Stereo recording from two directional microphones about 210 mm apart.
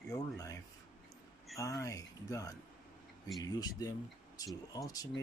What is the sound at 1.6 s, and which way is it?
Speech, 15° left (ahead or behind).